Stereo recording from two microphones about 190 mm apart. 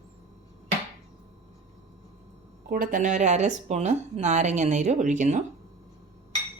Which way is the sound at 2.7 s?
45° right (ahead or behind).